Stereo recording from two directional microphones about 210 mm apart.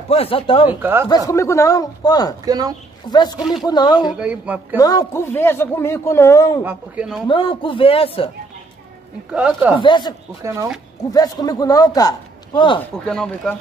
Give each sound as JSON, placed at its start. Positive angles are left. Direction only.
{"t": 0.1, "sound": "a man's voice", "side_deg": 25}
{"t": 0.7, "sound": "a man's voice", "side_deg": -10}
{"t": 1.0, "sound": "speech", "side_deg": 15}
{"t": 2.4, "sound": "a man's voice", "side_deg": -20}
{"t": 3.1, "sound": "a man's voice", "side_deg": 20}
{"t": 4.2, "sound": "a man's voice", "side_deg": -5}
{"t": 4.7, "sound": "speech", "side_deg": 15}
{"t": 6.6, "sound": "a man's voice", "side_deg": -10}
{"t": 7.2, "sound": "a man's voice", "side_deg": 25}
{"t": 9.3, "sound": "speech", "side_deg": -5}
{"t": 9.8, "sound": "a man's voice", "side_deg": 20}
{"t": 10.4, "sound": "a man's voice", "side_deg": -15}
{"t": 11.1, "sound": "speech", "side_deg": 20}
{"t": 13.0, "sound": "speech", "side_deg": 5}